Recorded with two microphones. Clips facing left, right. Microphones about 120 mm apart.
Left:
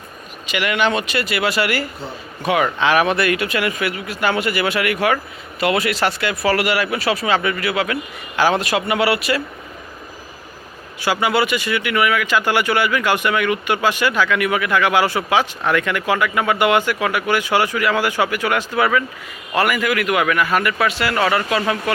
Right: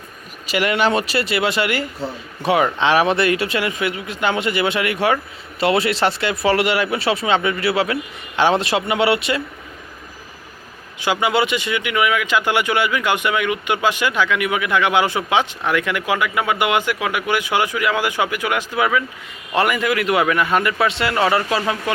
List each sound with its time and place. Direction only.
0.4 s speech: 35° right (ahead or behind)
11.0 s speech: 20° right (ahead or behind)
19.5 s speech: 25° right (ahead or behind)